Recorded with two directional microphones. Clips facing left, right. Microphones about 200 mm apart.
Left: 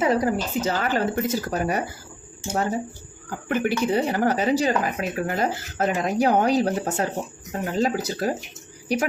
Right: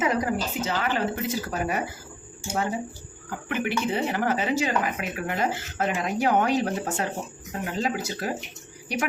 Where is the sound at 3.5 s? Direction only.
40° left (ahead or behind).